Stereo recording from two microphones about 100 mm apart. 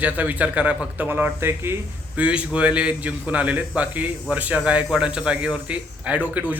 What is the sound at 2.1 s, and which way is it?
A man's voice, 10° right (ahead or behind).